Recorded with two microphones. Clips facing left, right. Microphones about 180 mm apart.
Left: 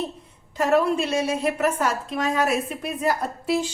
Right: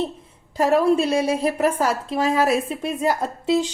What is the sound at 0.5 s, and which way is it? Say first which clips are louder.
A woman's voice: right 3 dB; 35° right (ahead or behind).